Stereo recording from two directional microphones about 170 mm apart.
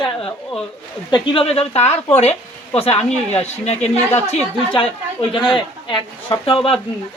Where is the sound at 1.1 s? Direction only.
30° left (ahead or behind).